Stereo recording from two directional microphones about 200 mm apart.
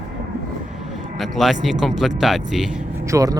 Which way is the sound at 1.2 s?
Centre (ahead or behind).